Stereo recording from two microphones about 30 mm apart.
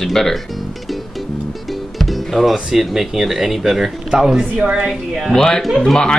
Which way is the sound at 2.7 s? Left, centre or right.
Centre.